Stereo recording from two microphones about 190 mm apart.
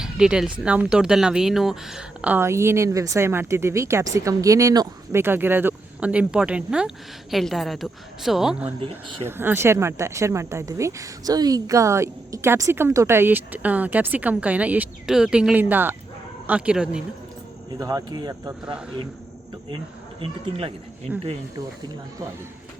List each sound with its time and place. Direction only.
0.0 s speech: 5° right (ahead or behind)
8.8 s speech: 25° right (ahead or behind)
9.2 s speech: 10° right (ahead or behind)
17.7 s speech: 20° right (ahead or behind)
18.6 s speech: 5° right (ahead or behind)
20.2 s speech: 30° right (ahead or behind)
21.1 s speech: 5° right (ahead or behind)